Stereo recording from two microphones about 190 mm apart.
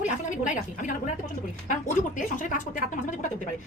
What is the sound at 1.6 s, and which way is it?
A woman's voice, 40° left (ahead or behind).